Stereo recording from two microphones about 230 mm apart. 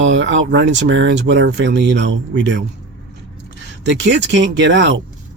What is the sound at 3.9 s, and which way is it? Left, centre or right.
Speech, right.